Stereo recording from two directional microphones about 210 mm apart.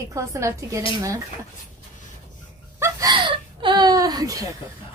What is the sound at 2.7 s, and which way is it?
Whimper, 15° right (ahead or behind).